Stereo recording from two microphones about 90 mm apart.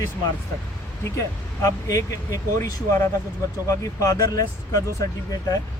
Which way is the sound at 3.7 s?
40° left (ahead or behind).